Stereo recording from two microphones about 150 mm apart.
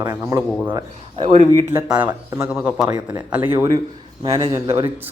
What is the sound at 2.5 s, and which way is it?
Speech, 5° right (ahead or behind).